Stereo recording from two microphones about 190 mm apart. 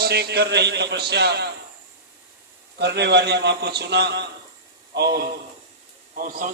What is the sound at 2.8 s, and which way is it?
A man's voice, 65° right (ahead or behind).